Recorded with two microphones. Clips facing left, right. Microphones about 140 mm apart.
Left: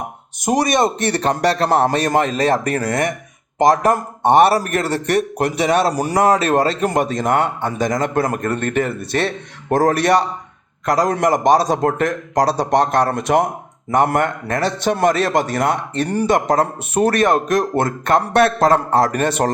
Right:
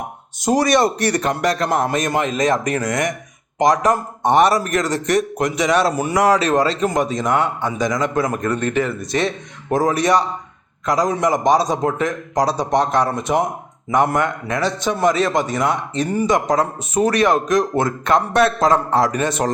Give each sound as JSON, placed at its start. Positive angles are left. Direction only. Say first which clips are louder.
{"t": 0.4, "sound": "a man's voice", "louder": "right 1 dB", "side_deg": 20}
{"t": 3.7, "sound": "a man's voice", "louder": "left 1 dB", "side_deg": 55}
{"t": 5.8, "sound": "a man's voice", "louder": "left 1 dB", "side_deg": 35}
{"t": 6.4, "sound": "a man's voice", "louder": "left 1 dB", "side_deg": 50}
{"t": 13.9, "sound": "a man's voice", "louder": "left 1 dB", "side_deg": 55}